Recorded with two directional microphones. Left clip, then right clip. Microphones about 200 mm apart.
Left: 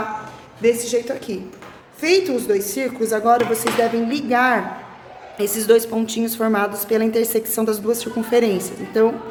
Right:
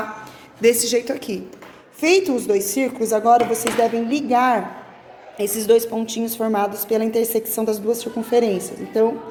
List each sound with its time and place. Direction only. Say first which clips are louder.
0.6 s a woman's voice: right 1 dB; 50° right (ahead or behind); by 9.1 s 5° right (ahead or behind)